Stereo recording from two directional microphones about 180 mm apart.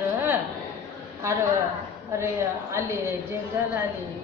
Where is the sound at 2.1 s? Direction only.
15° right (ahead or behind).